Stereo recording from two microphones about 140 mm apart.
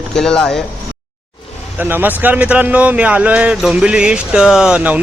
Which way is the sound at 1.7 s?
15° right (ahead or behind).